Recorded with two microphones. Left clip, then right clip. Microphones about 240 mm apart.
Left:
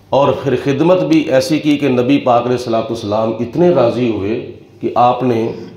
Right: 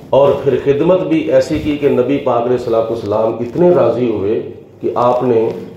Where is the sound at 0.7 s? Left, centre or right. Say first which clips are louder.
Left 1 dB; left.